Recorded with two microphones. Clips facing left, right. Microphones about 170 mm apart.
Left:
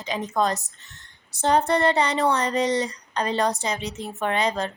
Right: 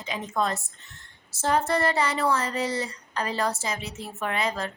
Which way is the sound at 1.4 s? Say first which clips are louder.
Left 4 dB; 35° left (ahead or behind).